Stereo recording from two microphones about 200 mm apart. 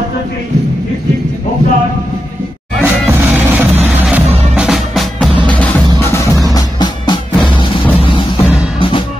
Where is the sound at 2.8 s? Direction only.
10° right (ahead or behind).